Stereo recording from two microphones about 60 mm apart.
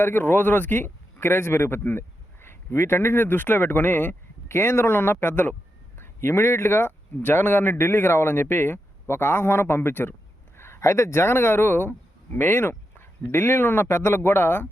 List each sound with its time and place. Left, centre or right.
0.0 s speech: left
4.4 s speech: left
6.0 s speech: left
10.6 s a man's voice: left